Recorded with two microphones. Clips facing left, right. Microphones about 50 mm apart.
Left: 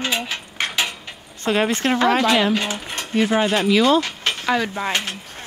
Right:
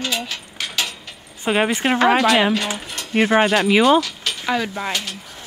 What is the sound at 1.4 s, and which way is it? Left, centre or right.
Speech, centre.